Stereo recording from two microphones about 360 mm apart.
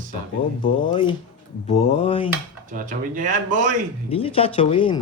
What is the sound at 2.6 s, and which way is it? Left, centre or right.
Speech, right.